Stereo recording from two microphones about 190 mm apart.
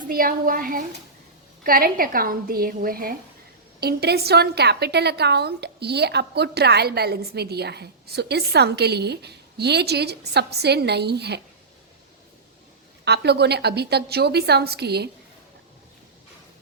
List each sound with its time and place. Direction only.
0.1 s a woman's voice: 50° right (ahead or behind)
13.1 s a woman's voice: 60° right (ahead or behind)